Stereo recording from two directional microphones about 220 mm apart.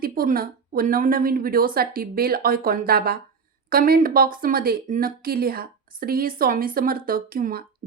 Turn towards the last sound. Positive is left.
turn(degrees=-40)  # may be behind; listen again after turning